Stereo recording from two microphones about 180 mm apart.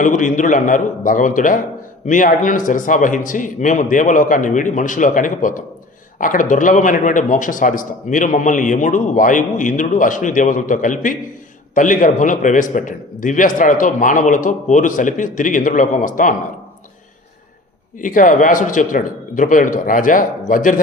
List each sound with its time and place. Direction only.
0.0 s a man's voice: 45° left (ahead or behind)
18.0 s a man's voice: 45° left (ahead or behind)